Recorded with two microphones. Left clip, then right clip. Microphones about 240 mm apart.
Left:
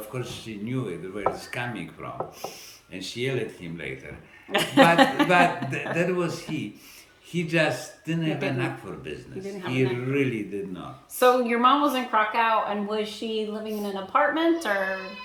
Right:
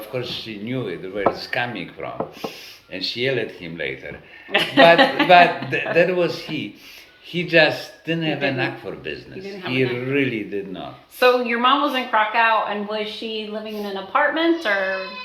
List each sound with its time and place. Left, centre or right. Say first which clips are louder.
0.1 s speech: right 11 dB; centre
4.5 s a woman's voice: right 5 dB; left
5.6 s speech: right 9 dB; centre
11.2 s a woman's voice: right 3 dB; left